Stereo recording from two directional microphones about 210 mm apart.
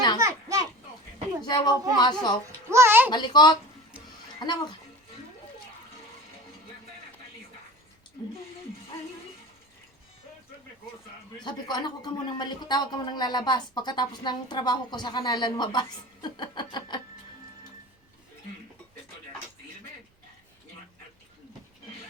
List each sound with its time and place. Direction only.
0.2 s children playing: 15° right (ahead or behind)
1.5 s speech: 20° left (ahead or behind)
2.6 s a sound: 10° right (ahead or behind)
3.1 s speech: 20° left (ahead or behind)
11.4 s speech: 20° left (ahead or behind)